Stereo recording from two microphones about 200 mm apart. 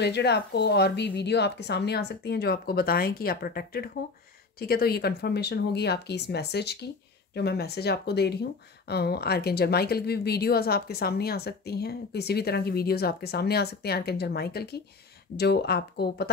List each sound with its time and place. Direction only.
0.0 s a woman's voice: 55° left (ahead or behind)